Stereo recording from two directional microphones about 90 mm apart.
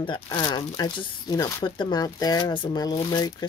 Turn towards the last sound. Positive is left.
turn(degrees=50)  # may be behind; listen again after turning